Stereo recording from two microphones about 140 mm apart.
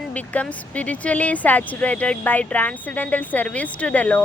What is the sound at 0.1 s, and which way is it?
Speech, 10° left (ahead or behind).